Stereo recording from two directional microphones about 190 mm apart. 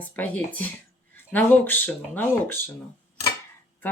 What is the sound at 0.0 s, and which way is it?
Speech, 10° left (ahead or behind).